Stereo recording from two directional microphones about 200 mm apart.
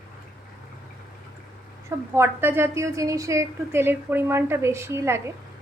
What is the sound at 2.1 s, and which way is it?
A woman's voice, 10° right (ahead or behind).